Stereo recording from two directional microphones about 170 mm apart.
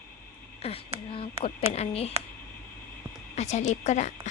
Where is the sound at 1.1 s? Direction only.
35° left (ahead or behind).